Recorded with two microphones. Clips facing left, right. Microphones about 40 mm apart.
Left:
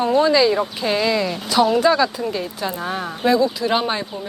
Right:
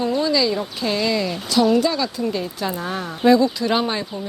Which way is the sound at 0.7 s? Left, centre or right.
Centre.